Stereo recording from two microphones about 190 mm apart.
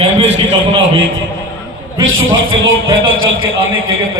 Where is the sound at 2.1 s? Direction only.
90° right.